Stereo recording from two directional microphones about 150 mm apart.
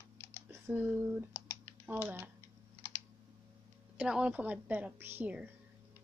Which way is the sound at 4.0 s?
5° right (ahead or behind).